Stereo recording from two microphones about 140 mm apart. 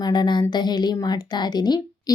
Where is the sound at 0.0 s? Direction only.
30° left (ahead or behind).